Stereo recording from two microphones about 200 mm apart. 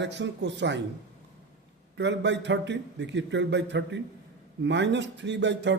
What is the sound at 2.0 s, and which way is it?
A man's voice, 60° right (ahead or behind).